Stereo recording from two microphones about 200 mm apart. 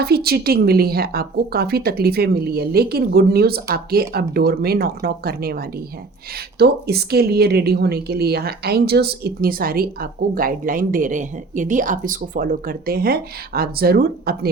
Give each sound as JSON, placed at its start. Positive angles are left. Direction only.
{"t": 0.0, "sound": "a woman's voice", "side_deg": -50}